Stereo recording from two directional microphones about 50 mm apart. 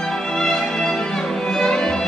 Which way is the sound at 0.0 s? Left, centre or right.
Centre.